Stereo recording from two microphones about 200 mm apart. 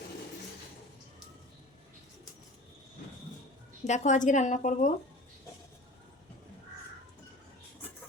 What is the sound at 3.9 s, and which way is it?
A woman's voice, 40° left (ahead or behind).